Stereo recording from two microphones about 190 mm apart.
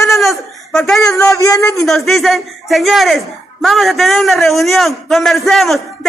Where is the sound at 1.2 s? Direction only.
15° left (ahead or behind).